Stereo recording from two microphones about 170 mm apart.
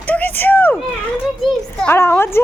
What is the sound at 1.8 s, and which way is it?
Speech, 15° left (ahead or behind).